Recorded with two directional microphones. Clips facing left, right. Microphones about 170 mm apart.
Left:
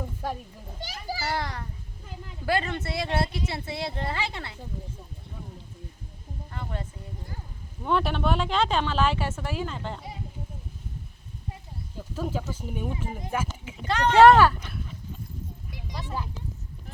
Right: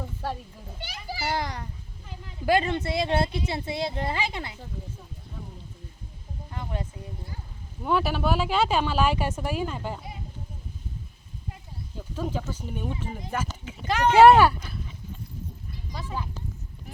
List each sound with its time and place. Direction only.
0.8 s a child's voice: 40° left (ahead or behind)
1.2 s speech: 20° right (ahead or behind)
6.5 s speech: 15° right (ahead or behind)
7.9 s speech: 5° right (ahead or behind)
12.1 s speech: 5° left (ahead or behind)
13.8 s speech: 10° right (ahead or behind)
16.0 s speech: centre (ahead or behind)